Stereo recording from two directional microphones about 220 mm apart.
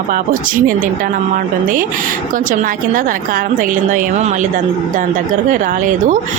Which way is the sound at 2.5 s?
35° right (ahead or behind).